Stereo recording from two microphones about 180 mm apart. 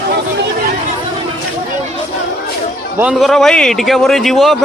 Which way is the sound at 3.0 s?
5° right (ahead or behind).